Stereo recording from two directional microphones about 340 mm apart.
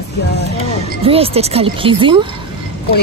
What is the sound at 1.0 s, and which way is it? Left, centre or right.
Speech, centre.